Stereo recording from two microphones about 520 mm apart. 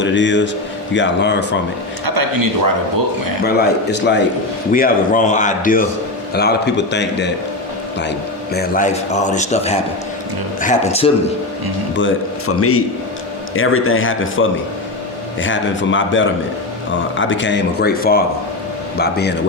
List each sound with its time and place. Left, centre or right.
0.0 s a man's voice: left
2.0 s speech: right
3.4 s a man's voice: centre
8.5 s speech: centre
11.9 s a man's voice: left